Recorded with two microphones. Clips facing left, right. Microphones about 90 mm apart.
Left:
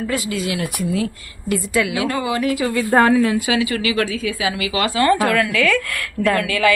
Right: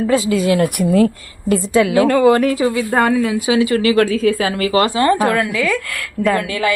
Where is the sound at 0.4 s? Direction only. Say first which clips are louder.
Right 9 dB; 40° right (ahead or behind).